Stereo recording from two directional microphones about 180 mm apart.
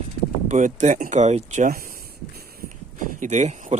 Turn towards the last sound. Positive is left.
turn(degrees=-40)  # may be behind; listen again after turning